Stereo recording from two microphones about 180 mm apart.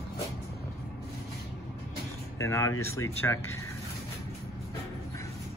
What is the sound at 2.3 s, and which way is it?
Speech, 15° left (ahead or behind).